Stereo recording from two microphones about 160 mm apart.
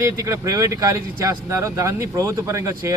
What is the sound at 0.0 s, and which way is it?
Speech, 20° right (ahead or behind).